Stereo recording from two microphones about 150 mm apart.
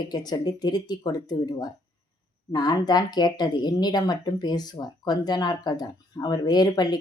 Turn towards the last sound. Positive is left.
turn(degrees=25)  # may be behind; listen again after turning